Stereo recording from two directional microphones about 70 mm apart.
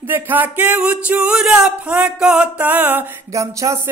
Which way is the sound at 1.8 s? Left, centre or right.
Centre.